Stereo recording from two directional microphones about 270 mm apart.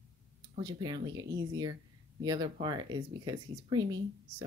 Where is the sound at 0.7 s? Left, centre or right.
Centre.